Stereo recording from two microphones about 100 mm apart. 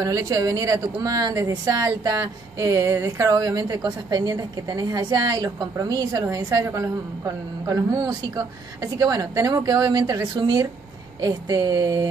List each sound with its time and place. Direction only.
0.0 s speech: 35° right (ahead or behind)